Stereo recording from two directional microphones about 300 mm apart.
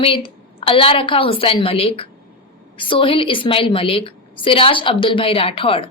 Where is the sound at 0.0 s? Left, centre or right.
Centre.